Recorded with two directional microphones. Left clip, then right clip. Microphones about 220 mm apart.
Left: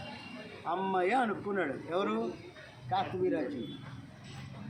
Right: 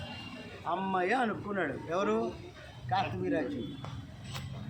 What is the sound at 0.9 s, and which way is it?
Speech, 10° right (ahead or behind).